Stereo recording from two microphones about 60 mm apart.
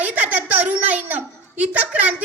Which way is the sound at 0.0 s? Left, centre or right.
Right.